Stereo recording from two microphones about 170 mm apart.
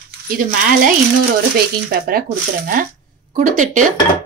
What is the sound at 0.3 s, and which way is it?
Speech, 55° right (ahead or behind).